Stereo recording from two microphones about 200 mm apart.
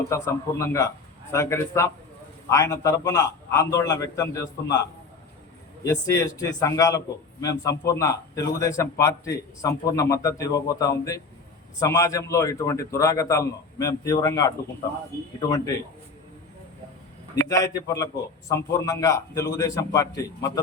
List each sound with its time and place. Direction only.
0.1 s a man's voice: 15° left (ahead or behind)
5.8 s a man's voice: 15° left (ahead or behind)
17.5 s a man's voice: 15° left (ahead or behind)